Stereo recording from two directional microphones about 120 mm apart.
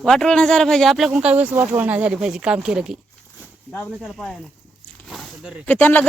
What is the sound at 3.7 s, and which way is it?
Speech, 15° left (ahead or behind).